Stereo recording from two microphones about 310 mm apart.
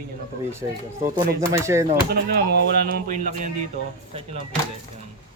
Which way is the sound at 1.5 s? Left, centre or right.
Centre.